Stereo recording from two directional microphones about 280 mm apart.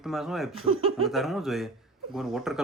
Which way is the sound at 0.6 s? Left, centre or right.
Right.